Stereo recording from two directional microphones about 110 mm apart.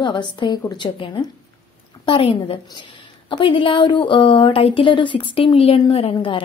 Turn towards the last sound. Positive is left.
turn(degrees=55)  # may be behind; listen again after turning